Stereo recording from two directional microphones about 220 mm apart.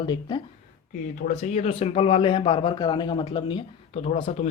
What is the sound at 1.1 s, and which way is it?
Speech, 35° left (ahead or behind).